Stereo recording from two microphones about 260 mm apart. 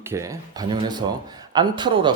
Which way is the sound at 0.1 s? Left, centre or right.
Centre.